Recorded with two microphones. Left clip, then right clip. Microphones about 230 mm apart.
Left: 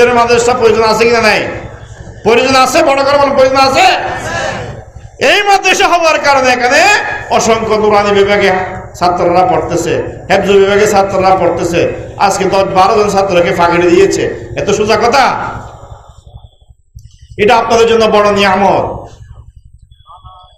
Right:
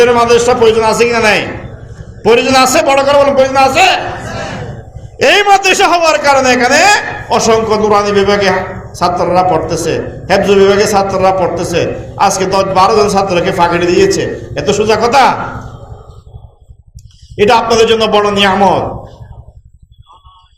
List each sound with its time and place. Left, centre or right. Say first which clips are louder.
0.0 s a man's voice: even; right
5.2 s a man's voice: right 1 dB; right
17.3 s a man's voice: even; right